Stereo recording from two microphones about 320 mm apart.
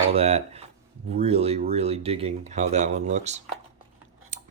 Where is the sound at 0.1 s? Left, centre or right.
Centre.